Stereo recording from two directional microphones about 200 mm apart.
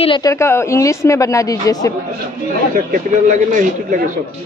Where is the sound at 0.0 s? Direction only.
20° left (ahead or behind).